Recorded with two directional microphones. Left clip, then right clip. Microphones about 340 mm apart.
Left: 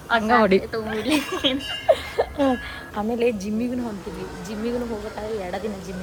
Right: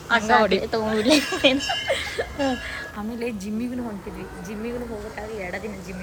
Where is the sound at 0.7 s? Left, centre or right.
Centre.